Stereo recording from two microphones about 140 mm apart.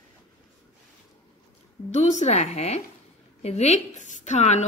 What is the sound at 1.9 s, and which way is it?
A woman's voice, 55° left (ahead or behind).